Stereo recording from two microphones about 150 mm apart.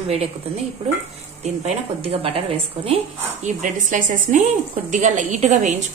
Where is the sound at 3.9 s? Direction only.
60° right (ahead or behind).